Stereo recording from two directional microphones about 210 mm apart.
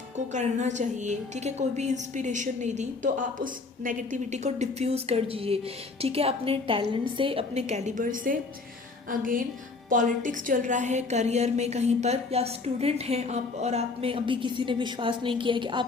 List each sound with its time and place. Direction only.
0.3 s a woman's voice: 35° right (ahead or behind)